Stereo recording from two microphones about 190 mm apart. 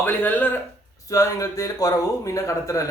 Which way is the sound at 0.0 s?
10° left (ahead or behind).